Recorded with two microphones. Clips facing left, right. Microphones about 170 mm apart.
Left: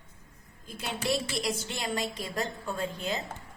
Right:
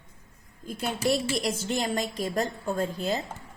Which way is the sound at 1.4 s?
40° right (ahead or behind).